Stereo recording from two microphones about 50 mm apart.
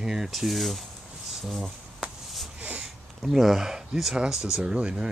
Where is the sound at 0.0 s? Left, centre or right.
Centre.